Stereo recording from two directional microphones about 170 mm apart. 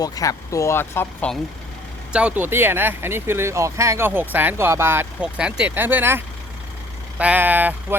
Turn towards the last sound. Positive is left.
turn(degrees=-10)  # may be behind; listen again after turning